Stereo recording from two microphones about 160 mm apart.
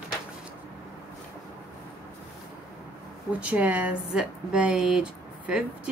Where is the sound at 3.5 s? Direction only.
10° right (ahead or behind).